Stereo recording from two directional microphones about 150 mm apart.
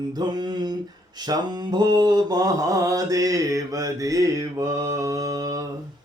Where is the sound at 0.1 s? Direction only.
25° right (ahead or behind).